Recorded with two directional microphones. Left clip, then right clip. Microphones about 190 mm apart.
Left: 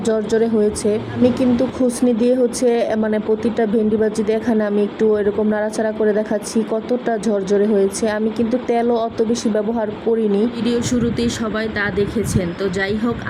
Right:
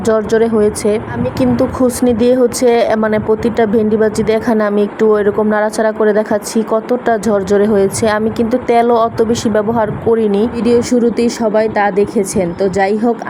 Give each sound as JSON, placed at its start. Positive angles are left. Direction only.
{"t": 0.0, "sound": "speech", "side_deg": -5}
{"t": 11.5, "sound": "speech", "side_deg": -15}